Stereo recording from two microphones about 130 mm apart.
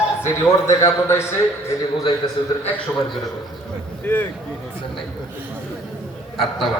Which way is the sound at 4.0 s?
15° left (ahead or behind).